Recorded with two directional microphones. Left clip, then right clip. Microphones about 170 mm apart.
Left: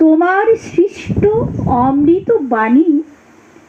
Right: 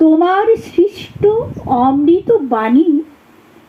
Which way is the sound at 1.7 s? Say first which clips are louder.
Right 1 dB; 40° left (ahead or behind).